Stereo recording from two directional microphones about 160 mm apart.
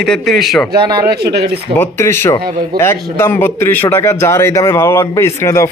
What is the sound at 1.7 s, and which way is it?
A man's voice, 15° left (ahead or behind).